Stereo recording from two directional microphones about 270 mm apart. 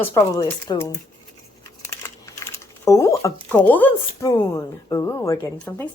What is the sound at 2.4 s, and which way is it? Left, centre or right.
Typing, centre.